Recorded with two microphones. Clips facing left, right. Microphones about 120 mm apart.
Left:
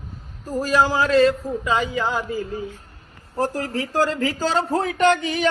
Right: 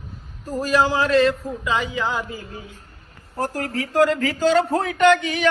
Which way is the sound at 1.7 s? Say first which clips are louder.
Left 1 dB; 40° left (ahead or behind).